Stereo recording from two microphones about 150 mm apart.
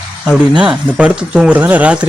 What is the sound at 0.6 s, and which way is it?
Speech, 10° right (ahead or behind).